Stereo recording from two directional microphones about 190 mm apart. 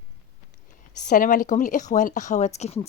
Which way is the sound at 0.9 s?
45° left (ahead or behind).